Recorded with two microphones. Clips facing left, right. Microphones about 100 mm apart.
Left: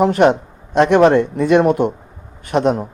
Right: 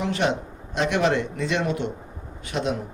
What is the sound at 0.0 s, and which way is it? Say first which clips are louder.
Speech: left 11 dB; 55° left (ahead or behind).